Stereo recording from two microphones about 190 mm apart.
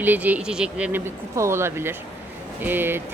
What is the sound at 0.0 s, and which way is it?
Speech, 10° right (ahead or behind).